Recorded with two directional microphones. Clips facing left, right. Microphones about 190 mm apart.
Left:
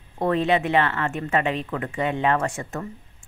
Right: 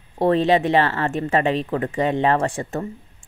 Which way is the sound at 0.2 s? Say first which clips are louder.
Right 4 dB; 35° right (ahead or behind).